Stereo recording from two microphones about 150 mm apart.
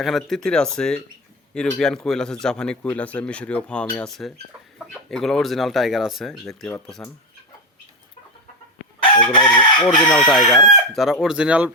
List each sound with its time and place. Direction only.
0.0 s speech: centre (ahead or behind)
9.1 s chicken: 35° left (ahead or behind)
9.6 s speech: 5° left (ahead or behind)